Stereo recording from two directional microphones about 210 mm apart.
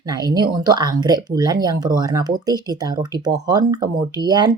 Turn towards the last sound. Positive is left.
turn(degrees=-20)  # may be behind; listen again after turning